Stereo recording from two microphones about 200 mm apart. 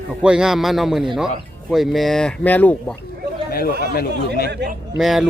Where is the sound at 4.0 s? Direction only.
50° left (ahead or behind).